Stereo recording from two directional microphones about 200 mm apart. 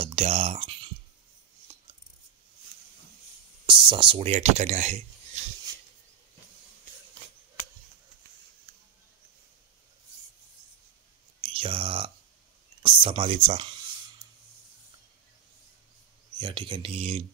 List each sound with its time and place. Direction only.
0.0 s a sound: 30° right (ahead or behind)
3.6 s speech: 25° right (ahead or behind)
11.4 s clicking: 25° right (ahead or behind)
12.8 s speech: 25° right (ahead or behind)
16.3 s speech: 25° right (ahead or behind)